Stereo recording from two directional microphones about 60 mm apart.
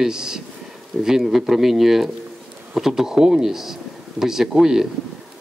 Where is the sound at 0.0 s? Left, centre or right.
Centre.